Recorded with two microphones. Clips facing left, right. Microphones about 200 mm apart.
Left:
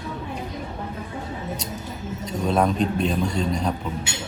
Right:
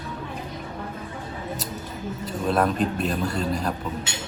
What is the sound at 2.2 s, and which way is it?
Speech, 5° right (ahead or behind).